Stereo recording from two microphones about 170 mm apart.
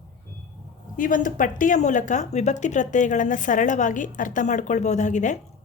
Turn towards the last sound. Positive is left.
turn(degrees=45)  # may be behind; listen again after turning